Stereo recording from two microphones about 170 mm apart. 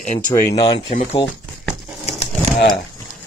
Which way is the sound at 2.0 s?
40° left (ahead or behind).